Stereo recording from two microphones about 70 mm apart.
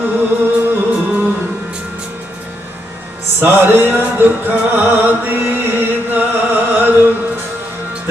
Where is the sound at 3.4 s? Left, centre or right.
Right.